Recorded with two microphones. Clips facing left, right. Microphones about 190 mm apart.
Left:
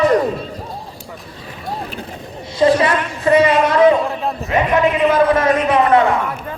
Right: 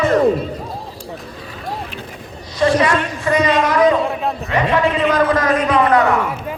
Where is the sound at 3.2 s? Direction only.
25° left (ahead or behind).